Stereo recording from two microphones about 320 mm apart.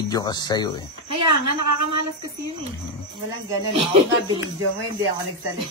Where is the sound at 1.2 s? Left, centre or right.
Right.